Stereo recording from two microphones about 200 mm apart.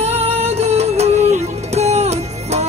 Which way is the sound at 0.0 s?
30° right (ahead or behind).